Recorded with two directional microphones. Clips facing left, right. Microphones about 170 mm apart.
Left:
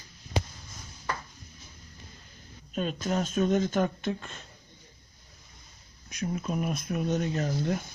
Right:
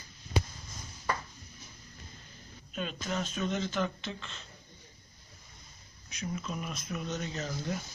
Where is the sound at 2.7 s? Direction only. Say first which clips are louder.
Left 6 dB; 45° left (ahead or behind).